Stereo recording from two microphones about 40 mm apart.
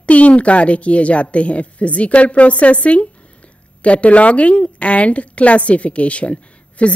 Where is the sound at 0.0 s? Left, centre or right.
Left.